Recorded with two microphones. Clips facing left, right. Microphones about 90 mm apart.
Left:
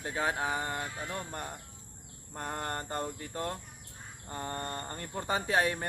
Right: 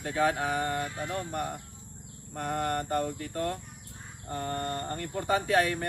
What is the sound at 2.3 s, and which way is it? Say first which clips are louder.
Speech: right 6 dB; 25° left (ahead or behind).